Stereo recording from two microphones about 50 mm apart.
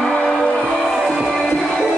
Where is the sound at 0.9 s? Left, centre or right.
Centre.